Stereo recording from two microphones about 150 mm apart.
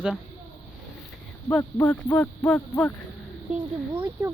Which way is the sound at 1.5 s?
15° left (ahead or behind).